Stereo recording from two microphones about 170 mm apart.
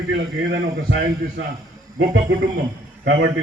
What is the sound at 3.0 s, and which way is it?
Speech, 90° right.